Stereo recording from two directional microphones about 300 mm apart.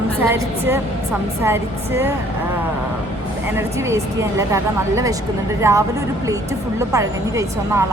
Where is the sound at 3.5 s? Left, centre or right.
Centre.